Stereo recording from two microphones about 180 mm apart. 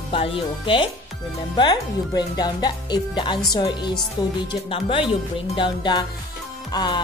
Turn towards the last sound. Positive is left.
turn(degrees=25)  # may be behind; listen again after turning